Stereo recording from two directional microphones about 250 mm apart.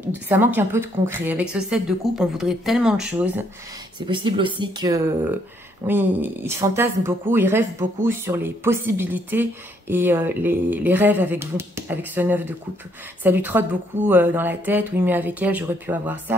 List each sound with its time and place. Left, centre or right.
0.1 s a woman's voice: centre
4.0 s speech: centre